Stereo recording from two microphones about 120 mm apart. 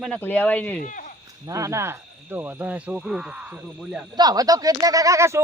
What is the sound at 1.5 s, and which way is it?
Speech, 25° right (ahead or behind).